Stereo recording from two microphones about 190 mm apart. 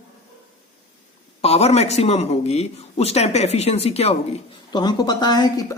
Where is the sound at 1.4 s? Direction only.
35° left (ahead or behind).